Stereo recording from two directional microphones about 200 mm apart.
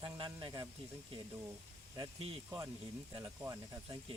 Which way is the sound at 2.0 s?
30° right (ahead or behind).